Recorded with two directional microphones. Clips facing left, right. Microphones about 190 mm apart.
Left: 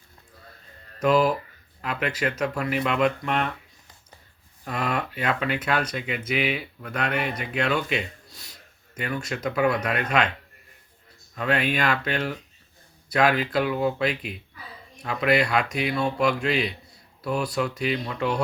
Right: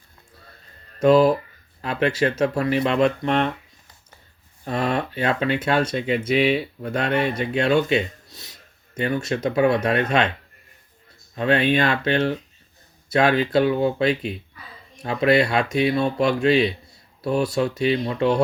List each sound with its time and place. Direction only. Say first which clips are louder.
0.9 s speech: right 5 dB; 25° right (ahead or behind)
4.6 s speech: right 5 dB; 30° right (ahead or behind)
11.3 s speech: right 5 dB; 25° right (ahead or behind)